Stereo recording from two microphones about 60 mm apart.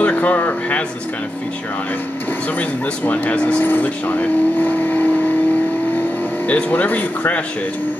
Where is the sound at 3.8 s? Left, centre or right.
Left.